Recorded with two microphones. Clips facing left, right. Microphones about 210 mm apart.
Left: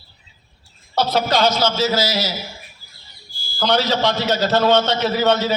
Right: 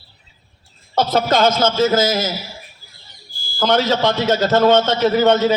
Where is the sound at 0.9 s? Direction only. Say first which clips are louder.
Right 2 dB; 50° right (ahead or behind).